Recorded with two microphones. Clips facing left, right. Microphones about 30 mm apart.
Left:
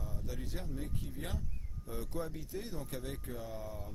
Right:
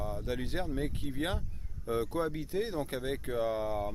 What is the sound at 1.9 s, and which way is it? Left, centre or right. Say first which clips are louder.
Speech: right 9 dB; right.